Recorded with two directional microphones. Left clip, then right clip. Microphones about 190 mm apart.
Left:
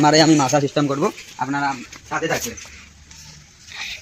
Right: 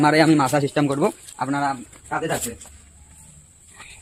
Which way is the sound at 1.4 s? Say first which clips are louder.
Left 1 dB; 25° right (ahead or behind).